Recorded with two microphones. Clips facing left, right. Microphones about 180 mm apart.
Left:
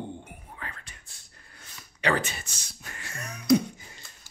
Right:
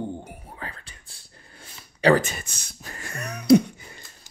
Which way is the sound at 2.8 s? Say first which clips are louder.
Right 5 dB; 35° right (ahead or behind).